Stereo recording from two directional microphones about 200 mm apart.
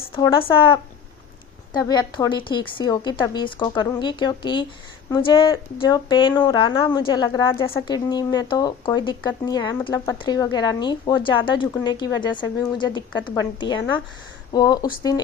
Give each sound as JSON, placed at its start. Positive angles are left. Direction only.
{"t": 0.1, "sound": "a woman's voice", "side_deg": 25}
{"t": 1.7, "sound": "a woman's voice", "side_deg": 20}